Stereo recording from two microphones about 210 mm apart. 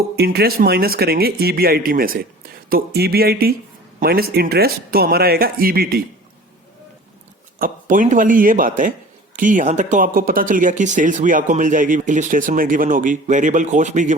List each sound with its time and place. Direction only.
0.2 s a man's voice: 50° right (ahead or behind)
7.6 s speech: 40° right (ahead or behind)